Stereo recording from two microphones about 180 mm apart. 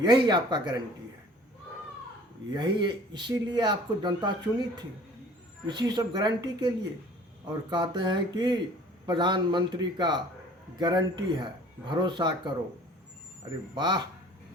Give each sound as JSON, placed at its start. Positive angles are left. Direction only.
{"t": 0.0, "sound": "speech", "side_deg": -25}
{"t": 2.5, "sound": "speech", "side_deg": -25}
{"t": 13.7, "sound": "speech", "side_deg": -25}